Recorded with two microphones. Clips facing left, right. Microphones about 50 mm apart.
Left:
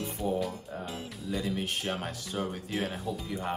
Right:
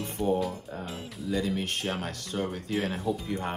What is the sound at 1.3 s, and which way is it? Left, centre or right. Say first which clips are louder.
Speech: right 3 dB; right.